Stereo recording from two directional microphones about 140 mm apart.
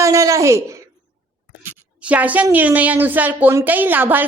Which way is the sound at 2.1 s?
10° right (ahead or behind).